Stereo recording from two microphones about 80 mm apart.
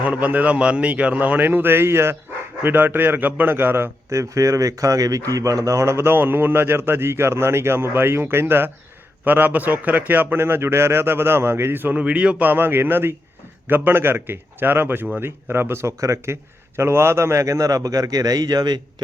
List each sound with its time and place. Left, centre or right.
0.0 s a man's voice: centre
4.1 s a man's voice: right